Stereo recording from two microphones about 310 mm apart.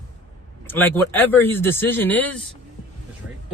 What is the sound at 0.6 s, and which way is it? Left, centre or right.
Speech, centre.